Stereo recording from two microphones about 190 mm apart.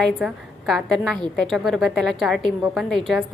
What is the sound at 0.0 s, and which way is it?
A woman's voice, centre (ahead or behind).